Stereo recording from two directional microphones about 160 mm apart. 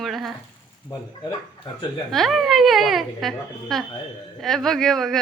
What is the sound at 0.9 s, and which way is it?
Speech, 25° left (ahead or behind).